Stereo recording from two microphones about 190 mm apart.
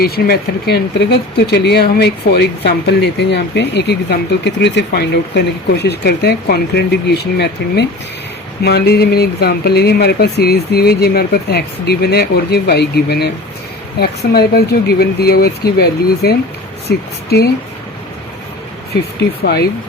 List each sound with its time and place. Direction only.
0.0 s speech: 55° left (ahead or behind)